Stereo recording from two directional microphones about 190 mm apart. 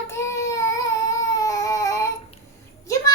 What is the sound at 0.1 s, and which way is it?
Baby cry, 15° left (ahead or behind).